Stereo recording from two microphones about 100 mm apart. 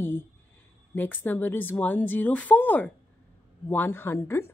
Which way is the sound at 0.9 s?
20° left (ahead or behind).